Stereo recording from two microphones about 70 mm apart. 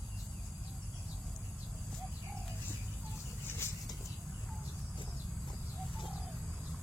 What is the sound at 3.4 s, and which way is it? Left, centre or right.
Vehicle, left.